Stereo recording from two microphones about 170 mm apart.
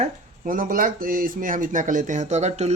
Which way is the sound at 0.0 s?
55° right (ahead or behind).